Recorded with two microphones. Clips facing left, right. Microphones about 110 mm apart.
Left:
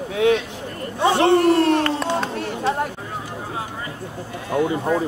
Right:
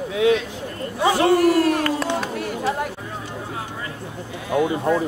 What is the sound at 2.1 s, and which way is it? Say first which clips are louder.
Chatter: left 1 dB; 30° left (ahead or behind).